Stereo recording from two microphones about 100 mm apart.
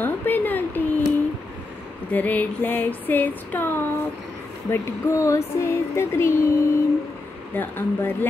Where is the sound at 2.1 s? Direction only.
15° left (ahead or behind).